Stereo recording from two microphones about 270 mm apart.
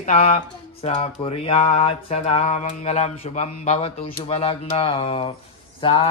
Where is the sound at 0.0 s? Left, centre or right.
Left.